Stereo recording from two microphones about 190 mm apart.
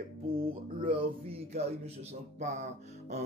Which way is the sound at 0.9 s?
30° right (ahead or behind).